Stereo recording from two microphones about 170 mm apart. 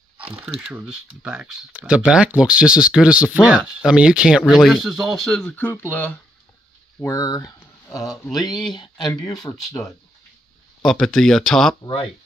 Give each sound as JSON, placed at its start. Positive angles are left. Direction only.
{"t": 0.4, "sound": "speech", "side_deg": -5}
{"t": 10.8, "sound": "speech", "side_deg": 0}
{"t": 11.8, "sound": "speech", "side_deg": 30}